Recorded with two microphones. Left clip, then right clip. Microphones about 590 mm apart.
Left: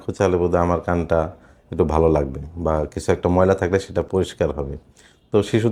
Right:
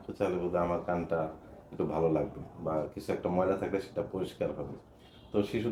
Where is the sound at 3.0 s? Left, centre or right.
Left.